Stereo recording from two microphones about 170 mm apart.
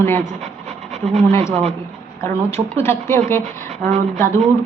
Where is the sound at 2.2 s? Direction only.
15° left (ahead or behind).